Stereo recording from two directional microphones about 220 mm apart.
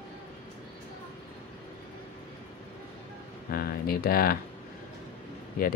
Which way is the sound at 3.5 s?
45° left (ahead or behind).